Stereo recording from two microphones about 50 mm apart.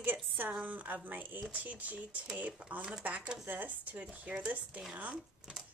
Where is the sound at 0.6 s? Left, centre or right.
Right.